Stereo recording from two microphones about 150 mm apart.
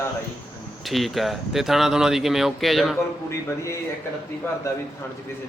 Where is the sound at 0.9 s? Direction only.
Centre (ahead or behind).